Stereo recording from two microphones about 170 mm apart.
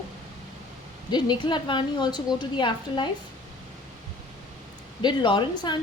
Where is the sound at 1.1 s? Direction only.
25° left (ahead or behind).